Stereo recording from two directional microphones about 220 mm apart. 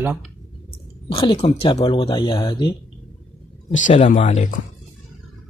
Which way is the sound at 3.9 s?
35° left (ahead or behind).